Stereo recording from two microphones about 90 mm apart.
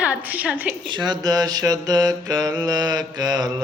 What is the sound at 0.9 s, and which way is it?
Mantra, 55° right (ahead or behind).